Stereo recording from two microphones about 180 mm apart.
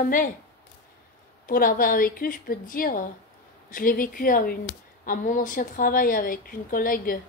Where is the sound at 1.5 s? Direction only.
50° left (ahead or behind).